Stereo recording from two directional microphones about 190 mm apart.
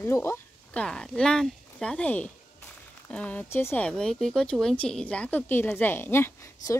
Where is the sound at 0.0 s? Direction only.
15° left (ahead or behind).